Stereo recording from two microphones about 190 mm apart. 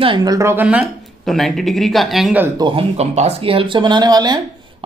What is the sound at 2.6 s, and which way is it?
A man's voice, 30° right (ahead or behind).